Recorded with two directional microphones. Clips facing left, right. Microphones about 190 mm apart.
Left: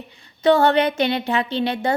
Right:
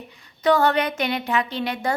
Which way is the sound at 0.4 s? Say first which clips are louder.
Left 3 dB; 25° left (ahead or behind).